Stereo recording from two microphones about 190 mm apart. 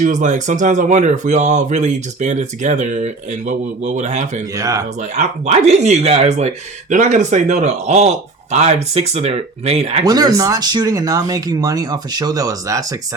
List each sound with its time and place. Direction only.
0.0 s speech: 40° right (ahead or behind)
4.5 s speech: 20° right (ahead or behind)
5.1 s speech: 40° right (ahead or behind)
10.0 s speech: 20° right (ahead or behind)